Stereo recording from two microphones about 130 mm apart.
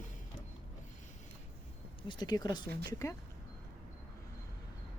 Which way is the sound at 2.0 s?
30° left (ahead or behind).